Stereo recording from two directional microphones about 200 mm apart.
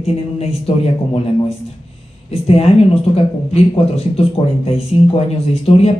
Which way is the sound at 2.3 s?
30° left (ahead or behind).